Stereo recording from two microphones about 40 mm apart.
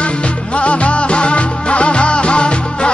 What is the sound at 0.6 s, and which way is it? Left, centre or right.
Music, left.